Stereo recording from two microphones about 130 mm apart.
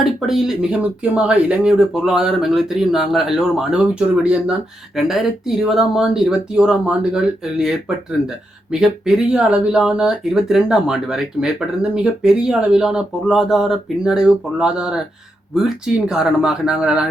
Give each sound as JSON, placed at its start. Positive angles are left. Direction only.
{"t": 0.0, "sound": "speech", "side_deg": -5}